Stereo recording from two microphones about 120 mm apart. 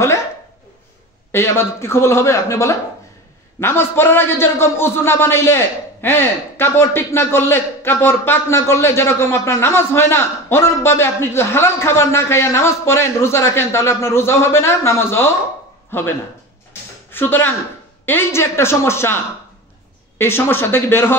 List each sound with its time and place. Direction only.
1.3 s a man's voice: 20° left (ahead or behind)
17.1 s a man's voice: 15° left (ahead or behind)